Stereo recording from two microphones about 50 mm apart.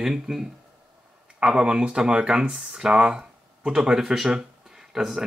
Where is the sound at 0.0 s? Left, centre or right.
Centre.